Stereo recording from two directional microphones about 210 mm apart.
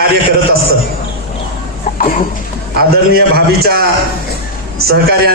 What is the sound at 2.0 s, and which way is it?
Speech, 40° left (ahead or behind).